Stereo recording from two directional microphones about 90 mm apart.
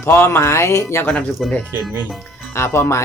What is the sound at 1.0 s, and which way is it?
Speech, 15° left (ahead or behind).